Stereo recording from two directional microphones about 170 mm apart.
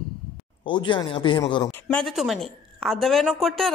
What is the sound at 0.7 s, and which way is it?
Speech, 30° left (ahead or behind).